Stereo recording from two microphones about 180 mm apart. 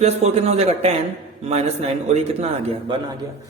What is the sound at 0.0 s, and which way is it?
A man's voice, 35° right (ahead or behind).